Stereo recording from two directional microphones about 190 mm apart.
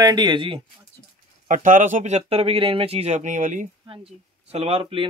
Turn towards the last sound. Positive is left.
turn(degrees=-30)  # may be behind; listen again after turning